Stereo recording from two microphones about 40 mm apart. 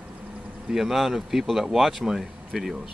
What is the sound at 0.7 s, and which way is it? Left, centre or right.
Speech, centre.